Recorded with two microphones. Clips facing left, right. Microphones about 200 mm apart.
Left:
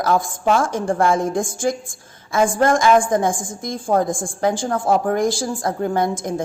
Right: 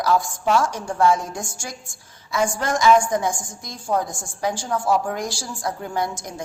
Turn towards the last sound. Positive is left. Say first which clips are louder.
# left 6 dB
turn(degrees=50)  # may be behind; listen again after turning